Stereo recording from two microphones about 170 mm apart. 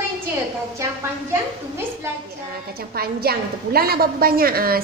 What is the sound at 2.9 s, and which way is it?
A woman's voice, 65° right (ahead or behind).